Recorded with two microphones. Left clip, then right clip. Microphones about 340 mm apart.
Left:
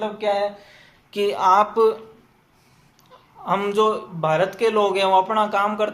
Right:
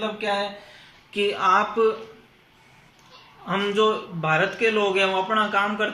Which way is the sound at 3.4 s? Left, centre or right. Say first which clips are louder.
Left 2 dB; centre.